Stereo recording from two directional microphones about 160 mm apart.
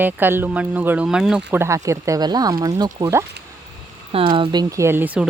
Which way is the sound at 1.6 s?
20° right (ahead or behind).